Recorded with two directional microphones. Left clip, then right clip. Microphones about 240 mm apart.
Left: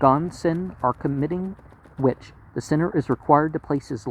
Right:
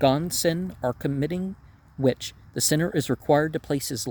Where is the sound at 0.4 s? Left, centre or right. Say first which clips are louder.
Left 2 dB; right.